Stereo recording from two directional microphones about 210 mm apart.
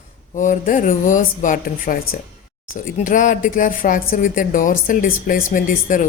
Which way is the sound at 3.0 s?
35° left (ahead or behind).